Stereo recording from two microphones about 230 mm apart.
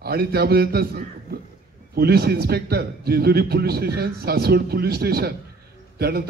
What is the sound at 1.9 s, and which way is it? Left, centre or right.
A man's voice, right.